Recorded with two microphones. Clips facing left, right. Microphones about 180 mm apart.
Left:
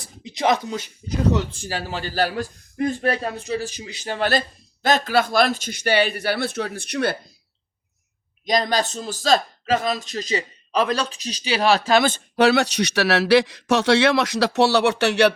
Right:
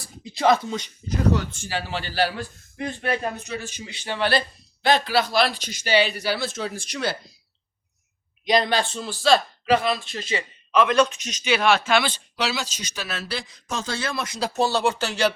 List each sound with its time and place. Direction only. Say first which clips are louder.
0.0 s a sound: right 1 dB; 20° left (ahead or behind)
1.3 s speech: left 1 dB; 20° left (ahead or behind)
1.5 s speech: left 1 dB; 40° left (ahead or behind); by 7.2 s 60° left (ahead or behind)
8.4 s speech: even; 40° left (ahead or behind); by 15.3 s 65° left (ahead or behind)